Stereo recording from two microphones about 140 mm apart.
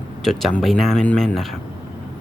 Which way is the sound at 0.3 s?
Centre (ahead or behind).